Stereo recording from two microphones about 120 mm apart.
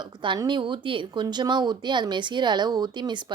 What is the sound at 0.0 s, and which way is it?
Speech, 40° right (ahead or behind).